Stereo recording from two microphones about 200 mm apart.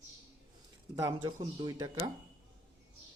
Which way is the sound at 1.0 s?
20° right (ahead or behind).